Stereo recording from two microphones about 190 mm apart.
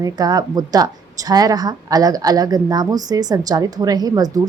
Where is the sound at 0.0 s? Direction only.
20° right (ahead or behind).